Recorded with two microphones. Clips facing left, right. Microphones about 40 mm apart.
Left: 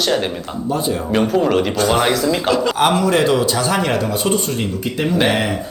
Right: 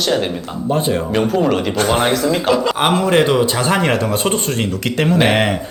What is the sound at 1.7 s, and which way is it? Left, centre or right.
Speech, right.